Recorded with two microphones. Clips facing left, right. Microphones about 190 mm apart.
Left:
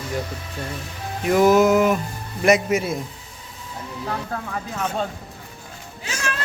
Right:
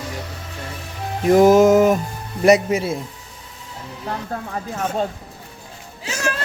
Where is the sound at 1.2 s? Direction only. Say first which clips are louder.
Right 4 dB; 40° right (ahead or behind).